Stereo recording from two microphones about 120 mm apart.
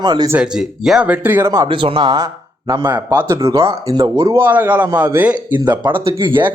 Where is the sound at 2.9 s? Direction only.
20° right (ahead or behind).